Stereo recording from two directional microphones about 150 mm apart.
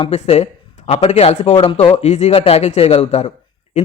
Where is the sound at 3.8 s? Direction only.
50° left (ahead or behind).